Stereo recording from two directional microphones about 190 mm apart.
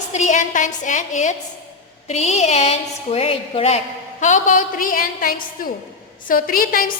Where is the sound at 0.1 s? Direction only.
40° left (ahead or behind).